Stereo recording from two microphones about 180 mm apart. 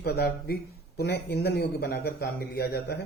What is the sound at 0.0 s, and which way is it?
A man's voice, 60° left (ahead or behind).